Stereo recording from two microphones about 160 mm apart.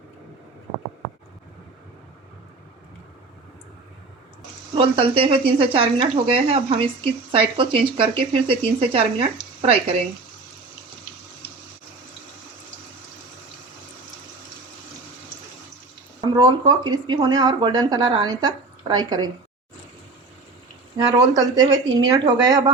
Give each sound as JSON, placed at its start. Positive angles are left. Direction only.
{"t": 4.7, "sound": "speech", "side_deg": -35}
{"t": 16.3, "sound": "speech", "side_deg": -25}
{"t": 21.2, "sound": "speech", "side_deg": -25}